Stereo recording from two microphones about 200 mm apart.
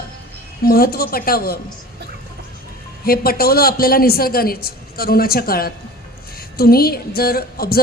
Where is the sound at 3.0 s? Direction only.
50° left (ahead or behind).